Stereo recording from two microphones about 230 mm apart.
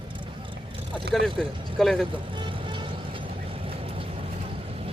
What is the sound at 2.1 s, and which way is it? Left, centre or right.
Vehicle, right.